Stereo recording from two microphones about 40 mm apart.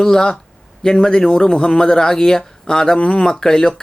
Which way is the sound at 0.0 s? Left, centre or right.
Centre.